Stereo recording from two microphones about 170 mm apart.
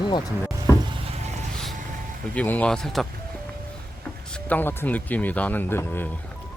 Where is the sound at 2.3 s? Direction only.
10° left (ahead or behind).